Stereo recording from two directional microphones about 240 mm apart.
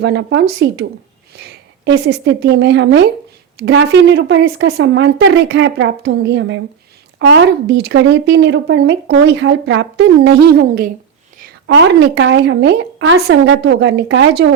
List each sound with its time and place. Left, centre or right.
0.0 s speech: right
1.8 s speech: right